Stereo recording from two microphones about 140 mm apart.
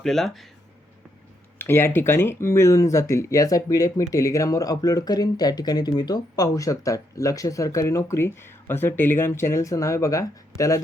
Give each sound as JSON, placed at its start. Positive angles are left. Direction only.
{"t": 0.0, "sound": "speech", "side_deg": 5}
{"t": 1.5, "sound": "speech", "side_deg": 15}